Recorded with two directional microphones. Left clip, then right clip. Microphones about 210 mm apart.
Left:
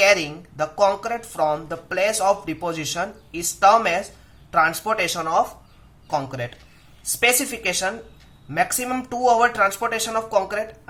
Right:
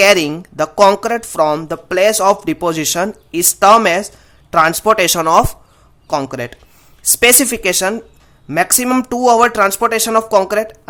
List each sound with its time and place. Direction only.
0.0 s speech: 50° right (ahead or behind)